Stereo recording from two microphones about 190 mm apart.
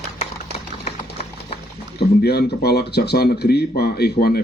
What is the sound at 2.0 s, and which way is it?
Speech, 60° left (ahead or behind).